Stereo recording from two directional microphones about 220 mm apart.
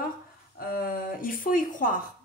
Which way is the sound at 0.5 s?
40° left (ahead or behind).